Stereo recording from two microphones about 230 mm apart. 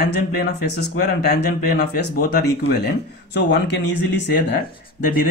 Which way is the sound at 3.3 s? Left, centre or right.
Left.